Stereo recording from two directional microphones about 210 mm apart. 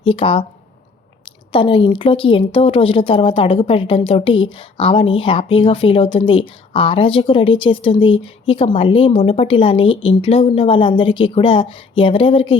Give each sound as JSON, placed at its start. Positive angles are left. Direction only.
{"t": 0.0, "sound": "a woman's voice", "side_deg": 25}